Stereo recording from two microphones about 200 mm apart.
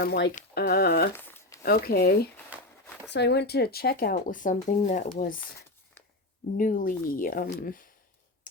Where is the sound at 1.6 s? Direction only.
50° left (ahead or behind).